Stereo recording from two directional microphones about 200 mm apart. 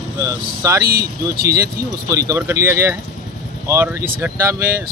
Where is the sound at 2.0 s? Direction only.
15° right (ahead or behind).